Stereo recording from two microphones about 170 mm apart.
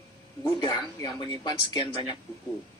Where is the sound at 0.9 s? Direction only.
25° left (ahead or behind).